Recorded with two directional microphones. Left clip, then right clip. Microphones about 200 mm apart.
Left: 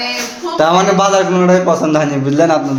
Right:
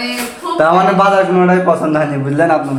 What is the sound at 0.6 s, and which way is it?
A man's voice, 25° left (ahead or behind).